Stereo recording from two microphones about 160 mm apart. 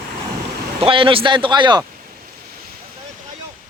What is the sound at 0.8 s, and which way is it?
Speech, 35° right (ahead or behind).